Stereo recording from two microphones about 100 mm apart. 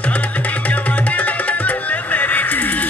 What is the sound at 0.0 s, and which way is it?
Music, 15° left (ahead or behind).